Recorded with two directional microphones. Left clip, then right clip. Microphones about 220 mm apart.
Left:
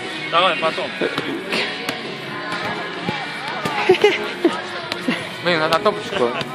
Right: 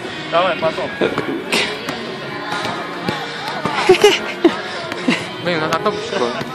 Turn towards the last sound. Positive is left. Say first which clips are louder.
# left 1 dB
turn(degrees=15)  # may be behind; listen again after turning